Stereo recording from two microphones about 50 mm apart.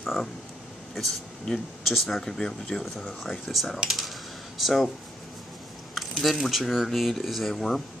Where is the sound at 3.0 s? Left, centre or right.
Centre.